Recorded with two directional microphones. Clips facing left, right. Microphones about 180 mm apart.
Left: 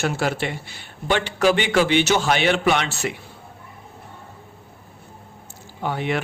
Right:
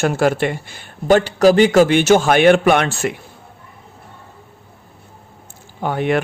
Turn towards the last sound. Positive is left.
turn(degrees=-50)  # may be behind; listen again after turning